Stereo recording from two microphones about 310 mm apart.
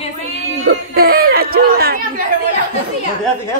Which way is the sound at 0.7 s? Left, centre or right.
Right.